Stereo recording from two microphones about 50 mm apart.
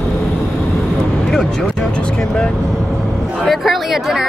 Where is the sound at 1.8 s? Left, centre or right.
Centre.